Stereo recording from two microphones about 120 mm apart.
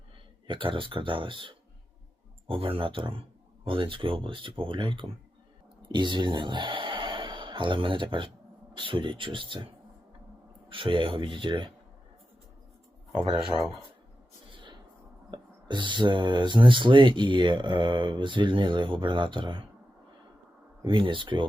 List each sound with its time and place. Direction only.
0.4 s speech: 45° right (ahead or behind)
10.7 s speech: 45° right (ahead or behind)
14.5 s a sound: 40° right (ahead or behind)
15.3 s speech: 40° right (ahead or behind)
20.8 s speech: 45° right (ahead or behind)